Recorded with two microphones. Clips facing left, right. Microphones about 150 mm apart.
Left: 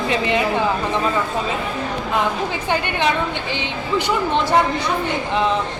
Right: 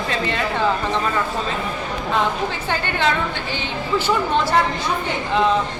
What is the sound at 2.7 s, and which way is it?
Speech, 15° left (ahead or behind).